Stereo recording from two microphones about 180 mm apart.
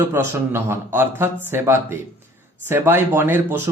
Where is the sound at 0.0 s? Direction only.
15° right (ahead or behind).